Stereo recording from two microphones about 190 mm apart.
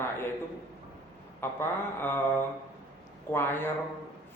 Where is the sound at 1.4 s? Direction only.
10° left (ahead or behind).